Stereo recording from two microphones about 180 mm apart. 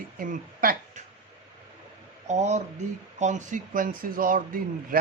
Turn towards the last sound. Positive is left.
turn(degrees=-50)  # may be behind; listen again after turning